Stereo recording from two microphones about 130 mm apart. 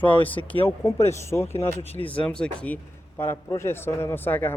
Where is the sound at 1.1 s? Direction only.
20° left (ahead or behind).